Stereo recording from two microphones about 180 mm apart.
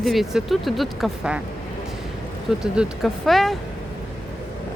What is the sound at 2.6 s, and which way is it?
Speech, 5° right (ahead or behind).